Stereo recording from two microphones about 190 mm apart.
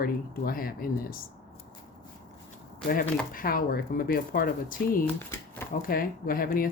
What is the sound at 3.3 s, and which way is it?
Speech, 50° left (ahead or behind).